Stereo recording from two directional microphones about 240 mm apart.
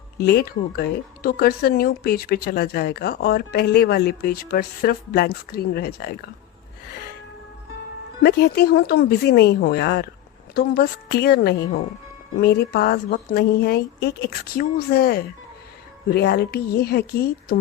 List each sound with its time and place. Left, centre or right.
0.2 s speech: left
8.2 s speech: left